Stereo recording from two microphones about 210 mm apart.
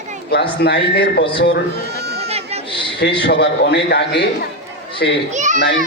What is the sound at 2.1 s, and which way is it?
Chatter, 30° right (ahead or behind).